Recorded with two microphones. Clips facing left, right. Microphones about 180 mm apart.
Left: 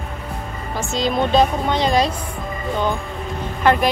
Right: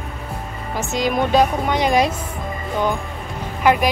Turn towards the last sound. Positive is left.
turn(degrees=-10)  # may be behind; listen again after turning